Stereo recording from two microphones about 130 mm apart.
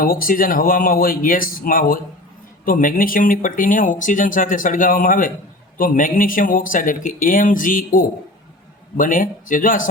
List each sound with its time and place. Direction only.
0.0 s speech: 90° left